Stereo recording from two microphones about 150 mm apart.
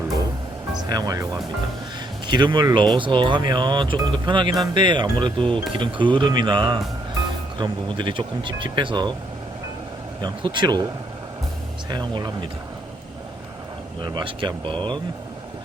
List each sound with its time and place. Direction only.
0.8 s speech: 25° right (ahead or behind)
10.2 s speech: 30° right (ahead or behind)
11.9 s speech: 30° right (ahead or behind)
14.0 s speech: 30° right (ahead or behind)